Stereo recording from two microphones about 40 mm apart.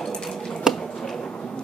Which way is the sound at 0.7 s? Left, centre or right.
Centre.